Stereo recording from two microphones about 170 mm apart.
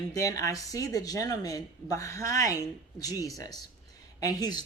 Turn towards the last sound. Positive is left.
turn(degrees=25)  # may be behind; listen again after turning